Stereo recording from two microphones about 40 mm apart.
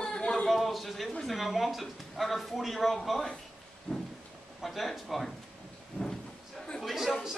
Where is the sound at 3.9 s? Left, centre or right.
Centre.